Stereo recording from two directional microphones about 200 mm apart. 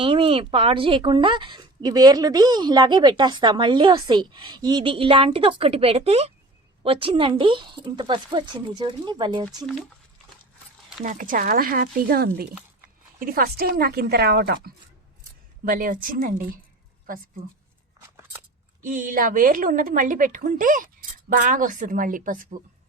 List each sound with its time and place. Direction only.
0.0 s a woman's voice: 30° right (ahead or behind)
11.0 s speech: 40° right (ahead or behind)
18.8 s a woman's voice: 40° right (ahead or behind)